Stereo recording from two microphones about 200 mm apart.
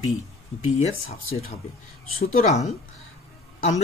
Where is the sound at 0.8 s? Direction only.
30° left (ahead or behind).